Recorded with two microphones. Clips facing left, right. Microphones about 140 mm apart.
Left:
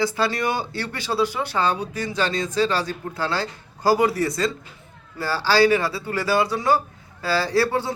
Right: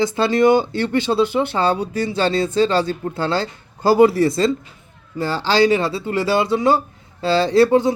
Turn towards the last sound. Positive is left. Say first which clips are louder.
# right 8 dB
turn(degrees=-20)  # may be behind; listen again after turning